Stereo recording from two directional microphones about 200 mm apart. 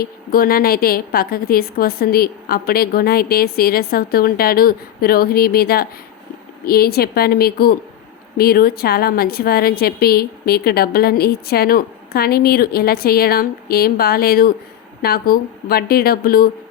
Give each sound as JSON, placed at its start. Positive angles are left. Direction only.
{"t": 0.0, "sound": "a woman's voice", "side_deg": 45}